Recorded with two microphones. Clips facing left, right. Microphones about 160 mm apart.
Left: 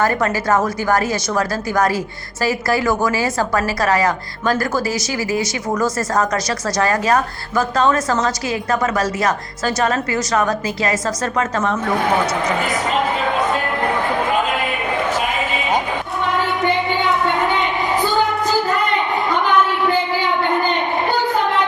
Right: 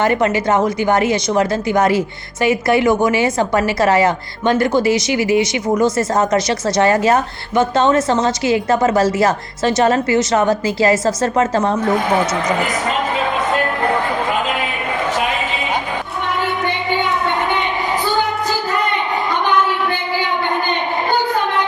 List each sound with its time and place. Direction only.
0.0 s a woman's voice: 20° right (ahead or behind)